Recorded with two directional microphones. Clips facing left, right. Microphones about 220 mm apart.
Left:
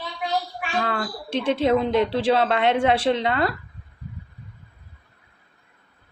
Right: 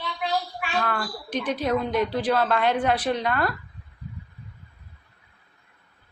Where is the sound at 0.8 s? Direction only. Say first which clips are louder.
Left 2 dB; 25° left (ahead or behind).